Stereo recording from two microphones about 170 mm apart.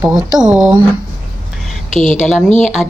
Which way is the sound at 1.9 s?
45° left (ahead or behind).